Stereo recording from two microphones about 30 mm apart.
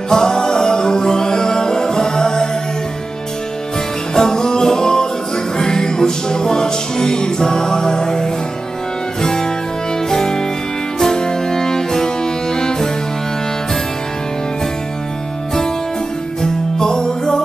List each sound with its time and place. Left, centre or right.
0.1 s music: centre
4.1 s music: left
16.7 s music: left